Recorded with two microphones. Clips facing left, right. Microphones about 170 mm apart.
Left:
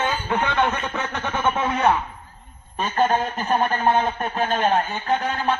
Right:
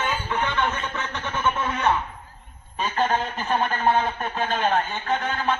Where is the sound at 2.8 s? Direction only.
45° left (ahead or behind).